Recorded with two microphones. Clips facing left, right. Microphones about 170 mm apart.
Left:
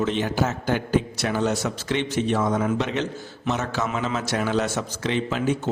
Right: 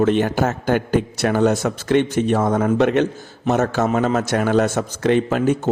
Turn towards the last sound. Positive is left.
turn(degrees=-50)  # may be behind; listen again after turning